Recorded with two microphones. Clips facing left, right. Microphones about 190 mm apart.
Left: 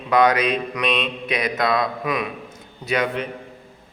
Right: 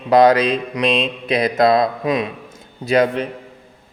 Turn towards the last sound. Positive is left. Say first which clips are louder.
# right 7 dB
turn(degrees=-30)  # may be behind; listen again after turning